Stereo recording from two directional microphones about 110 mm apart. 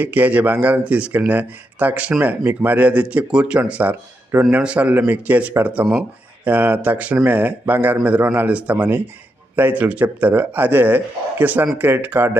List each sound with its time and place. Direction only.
0.0 s speech: 15° right (ahead or behind)